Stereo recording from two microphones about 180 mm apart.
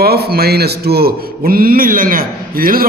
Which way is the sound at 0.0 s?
60° right (ahead or behind).